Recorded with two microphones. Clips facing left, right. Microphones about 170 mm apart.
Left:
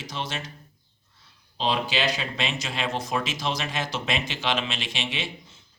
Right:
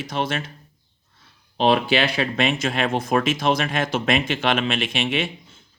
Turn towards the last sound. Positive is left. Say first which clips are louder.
# right 8 dB
turn(degrees=-55)  # may be behind; listen again after turning